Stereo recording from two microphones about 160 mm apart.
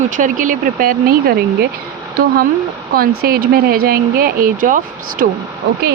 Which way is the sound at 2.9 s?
70° right (ahead or behind).